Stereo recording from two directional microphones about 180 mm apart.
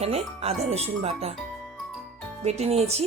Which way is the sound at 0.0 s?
35° right (ahead or behind).